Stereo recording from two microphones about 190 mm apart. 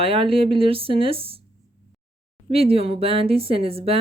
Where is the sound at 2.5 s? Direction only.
30° right (ahead or behind).